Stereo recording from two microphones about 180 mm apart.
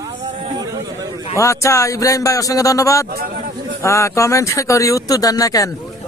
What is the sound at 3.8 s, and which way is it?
Speech, 15° left (ahead or behind).